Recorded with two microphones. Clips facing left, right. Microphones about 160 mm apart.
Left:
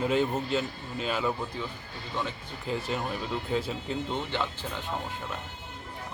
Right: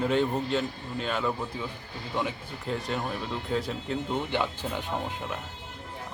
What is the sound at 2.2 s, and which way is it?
Speech, 15° right (ahead or behind).